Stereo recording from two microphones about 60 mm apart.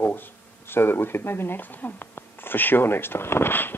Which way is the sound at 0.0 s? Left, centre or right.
Left.